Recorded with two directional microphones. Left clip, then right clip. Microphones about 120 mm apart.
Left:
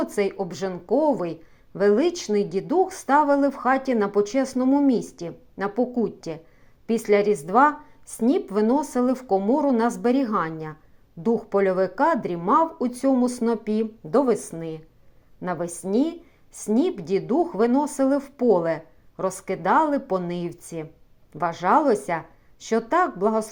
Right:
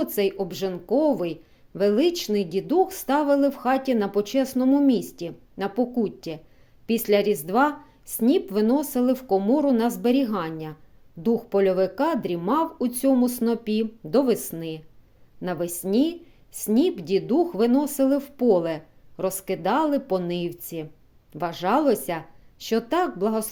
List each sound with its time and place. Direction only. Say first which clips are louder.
0.0 s speech: even; 20° right (ahead or behind)
15.4 s a woman's voice: even; 25° right (ahead or behind)